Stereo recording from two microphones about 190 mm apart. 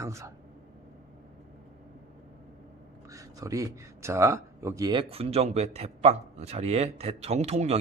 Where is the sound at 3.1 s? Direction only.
15° right (ahead or behind).